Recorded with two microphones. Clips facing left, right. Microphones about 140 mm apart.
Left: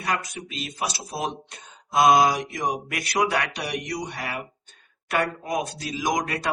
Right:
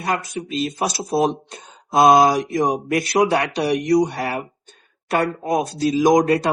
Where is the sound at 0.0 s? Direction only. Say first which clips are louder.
Right 5 dB; 25° right (ahead or behind).